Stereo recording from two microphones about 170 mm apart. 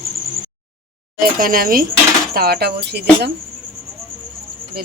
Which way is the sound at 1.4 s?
55° right (ahead or behind).